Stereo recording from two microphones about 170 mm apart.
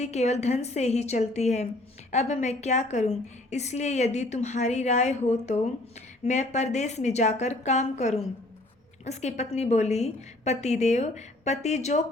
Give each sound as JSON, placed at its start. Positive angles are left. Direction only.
{"t": 0.0, "sound": "a woman's voice", "side_deg": 40}